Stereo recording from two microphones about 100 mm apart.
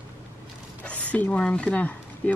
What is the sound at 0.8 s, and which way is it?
Speech, 15° left (ahead or behind).